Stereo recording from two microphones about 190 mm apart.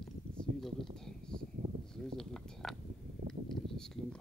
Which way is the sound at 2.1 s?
5° left (ahead or behind).